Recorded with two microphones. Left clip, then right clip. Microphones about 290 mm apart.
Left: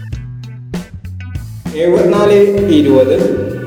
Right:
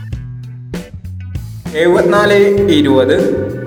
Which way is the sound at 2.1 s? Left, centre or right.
Right.